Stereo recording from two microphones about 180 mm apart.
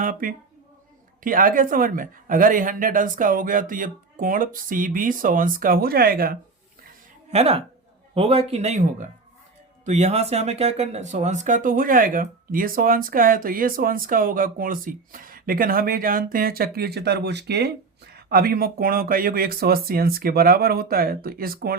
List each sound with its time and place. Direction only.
0.0 s speech: 50° right (ahead or behind)
7.3 s speech: 35° right (ahead or behind); by 21.8 s 55° right (ahead or behind)